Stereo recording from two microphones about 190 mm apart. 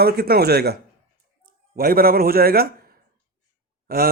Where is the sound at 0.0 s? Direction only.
55° right (ahead or behind).